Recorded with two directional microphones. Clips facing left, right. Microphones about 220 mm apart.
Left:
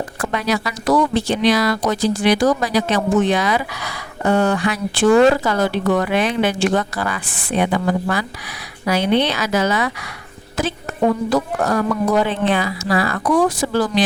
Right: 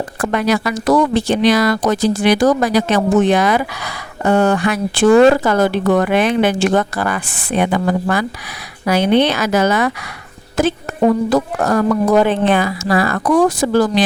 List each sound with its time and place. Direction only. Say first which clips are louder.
0.2 s speech: right 5 dB; 50° right (ahead or behind)